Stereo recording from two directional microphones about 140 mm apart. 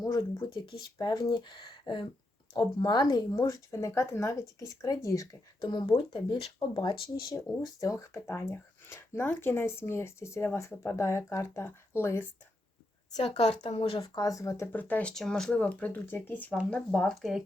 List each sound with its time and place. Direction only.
0.0 s speech: 30° left (ahead or behind)
13.1 s a woman's voice: 45° left (ahead or behind)
14.2 s speech: 25° left (ahead or behind); by 17.4 s centre (ahead or behind)